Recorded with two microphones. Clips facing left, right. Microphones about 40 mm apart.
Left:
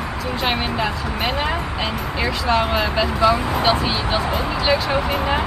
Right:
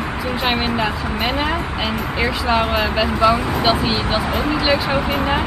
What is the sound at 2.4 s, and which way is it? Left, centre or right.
Speech, centre.